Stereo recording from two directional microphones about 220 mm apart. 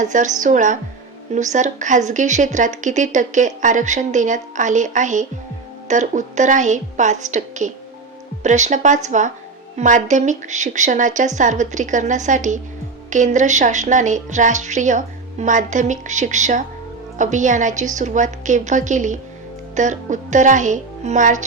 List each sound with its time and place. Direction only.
0.0 s a woman's voice: 35° right (ahead or behind)